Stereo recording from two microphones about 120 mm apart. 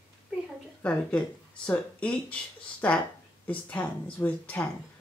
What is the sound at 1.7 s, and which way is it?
Speech, 10° left (ahead or behind).